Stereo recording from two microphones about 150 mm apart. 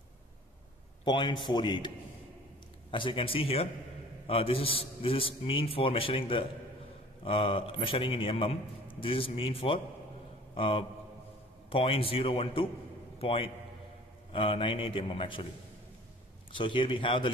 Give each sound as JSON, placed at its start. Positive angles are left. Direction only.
{"t": 1.0, "sound": "a man's voice", "side_deg": 30}
{"t": 2.9, "sound": "a man's voice", "side_deg": 35}
{"t": 16.5, "sound": "a man's voice", "side_deg": 35}